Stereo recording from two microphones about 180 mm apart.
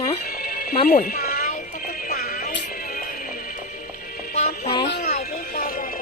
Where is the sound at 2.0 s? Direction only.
55° left (ahead or behind).